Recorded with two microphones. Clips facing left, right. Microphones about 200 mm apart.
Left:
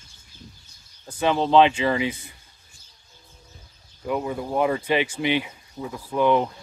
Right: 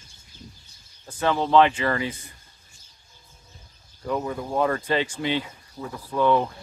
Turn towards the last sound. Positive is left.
turn(degrees=15)  # may be behind; listen again after turning